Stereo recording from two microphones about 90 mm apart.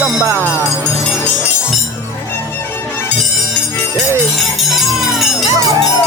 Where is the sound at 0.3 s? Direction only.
25° right (ahead or behind).